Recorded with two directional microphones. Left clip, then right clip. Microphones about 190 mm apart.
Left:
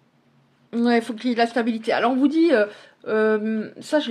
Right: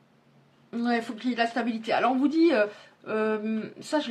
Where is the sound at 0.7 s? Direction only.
45° left (ahead or behind).